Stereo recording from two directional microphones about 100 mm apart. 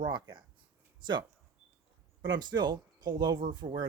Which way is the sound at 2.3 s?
45° right (ahead or behind).